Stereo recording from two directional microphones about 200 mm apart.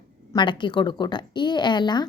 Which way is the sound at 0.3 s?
25° left (ahead or behind).